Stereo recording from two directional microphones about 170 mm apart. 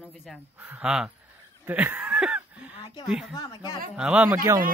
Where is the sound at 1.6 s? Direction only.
10° right (ahead or behind).